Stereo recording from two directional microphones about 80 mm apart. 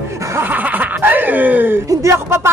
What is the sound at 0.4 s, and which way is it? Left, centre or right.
Chuckle, right.